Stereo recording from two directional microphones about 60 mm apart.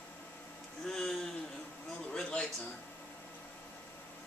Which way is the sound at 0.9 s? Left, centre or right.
Centre.